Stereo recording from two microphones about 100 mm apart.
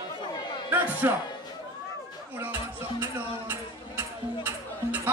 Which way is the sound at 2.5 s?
20° right (ahead or behind).